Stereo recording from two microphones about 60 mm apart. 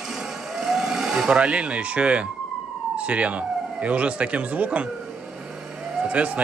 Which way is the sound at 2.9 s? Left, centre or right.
Right.